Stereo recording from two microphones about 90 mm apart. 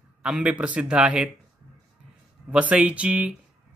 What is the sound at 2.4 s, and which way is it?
Speech, 15° right (ahead or behind).